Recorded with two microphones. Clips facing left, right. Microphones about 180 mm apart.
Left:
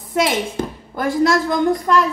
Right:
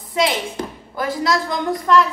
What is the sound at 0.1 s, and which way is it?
A woman's voice, 50° left (ahead or behind).